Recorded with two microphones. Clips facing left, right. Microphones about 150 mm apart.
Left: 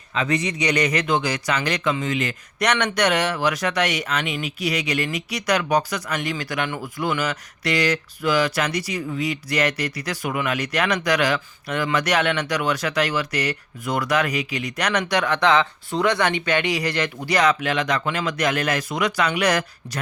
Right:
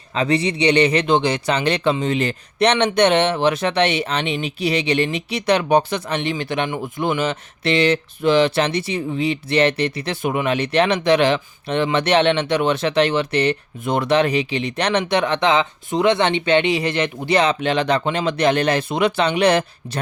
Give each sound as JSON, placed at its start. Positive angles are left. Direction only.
{"t": 0.1, "sound": "speech", "side_deg": -30}